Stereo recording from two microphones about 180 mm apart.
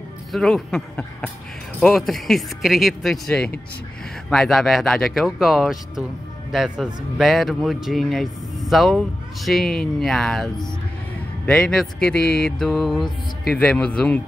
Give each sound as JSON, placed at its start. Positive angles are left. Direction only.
{"t": 0.3, "sound": "speech", "side_deg": 0}
{"t": 12.2, "sound": "mantra", "side_deg": 55}
{"t": 12.4, "sound": "speech", "side_deg": 0}